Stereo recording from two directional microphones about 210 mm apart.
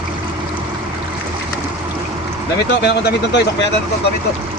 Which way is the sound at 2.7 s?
55° left (ahead or behind).